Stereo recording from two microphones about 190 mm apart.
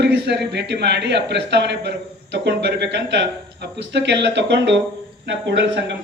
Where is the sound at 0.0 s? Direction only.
60° right (ahead or behind).